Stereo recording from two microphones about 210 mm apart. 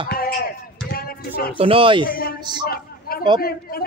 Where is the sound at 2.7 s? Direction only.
45° left (ahead or behind).